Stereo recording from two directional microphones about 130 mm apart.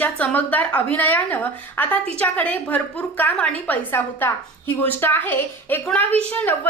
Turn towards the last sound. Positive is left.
turn(degrees=10)  # may be behind; listen again after turning